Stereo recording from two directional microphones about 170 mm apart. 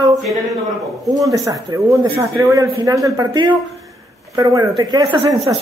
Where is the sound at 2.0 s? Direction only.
20° right (ahead or behind).